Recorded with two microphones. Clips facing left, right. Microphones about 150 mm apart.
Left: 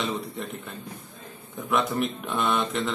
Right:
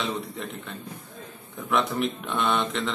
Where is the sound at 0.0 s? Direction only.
Centre (ahead or behind).